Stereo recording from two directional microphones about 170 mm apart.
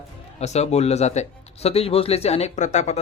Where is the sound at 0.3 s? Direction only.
40° left (ahead or behind).